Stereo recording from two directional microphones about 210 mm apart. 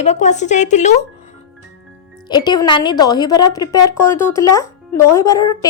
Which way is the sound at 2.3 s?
20° left (ahead or behind).